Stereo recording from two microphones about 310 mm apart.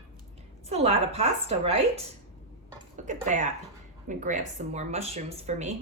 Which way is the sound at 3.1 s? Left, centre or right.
Right.